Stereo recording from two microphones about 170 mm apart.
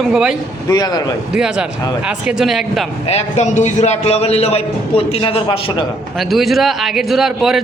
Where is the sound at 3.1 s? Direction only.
40° left (ahead or behind).